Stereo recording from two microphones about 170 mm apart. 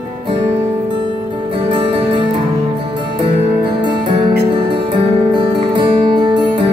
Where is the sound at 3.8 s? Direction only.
30° right (ahead or behind).